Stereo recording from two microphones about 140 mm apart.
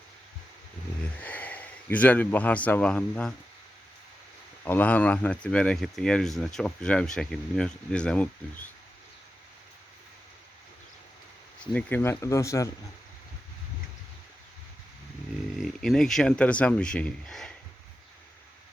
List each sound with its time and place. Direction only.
1.2 s speech: 10° left (ahead or behind)
4.6 s speech: 10° left (ahead or behind)
11.6 s speech: 10° left (ahead or behind)
15.5 s speech: centre (ahead or behind)